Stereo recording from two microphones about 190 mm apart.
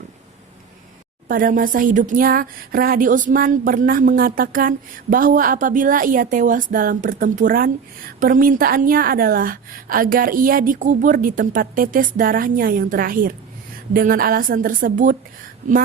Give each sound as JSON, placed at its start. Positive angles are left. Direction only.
{"t": 1.3, "sound": "a woman's voice", "side_deg": -45}